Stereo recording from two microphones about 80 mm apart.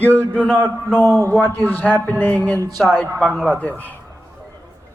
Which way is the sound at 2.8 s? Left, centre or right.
Centre.